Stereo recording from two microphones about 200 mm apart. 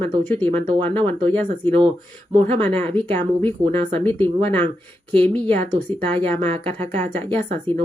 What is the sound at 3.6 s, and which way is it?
Speech, 20° right (ahead or behind).